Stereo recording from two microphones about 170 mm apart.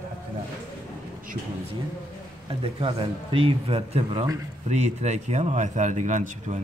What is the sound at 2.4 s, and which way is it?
A man's voice, 30° right (ahead or behind).